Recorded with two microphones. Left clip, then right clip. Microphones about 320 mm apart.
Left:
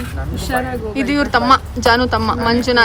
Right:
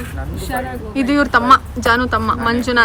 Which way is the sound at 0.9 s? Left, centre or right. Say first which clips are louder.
Right 2 dB; centre.